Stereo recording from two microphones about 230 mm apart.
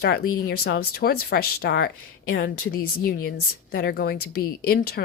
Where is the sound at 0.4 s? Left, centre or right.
Left.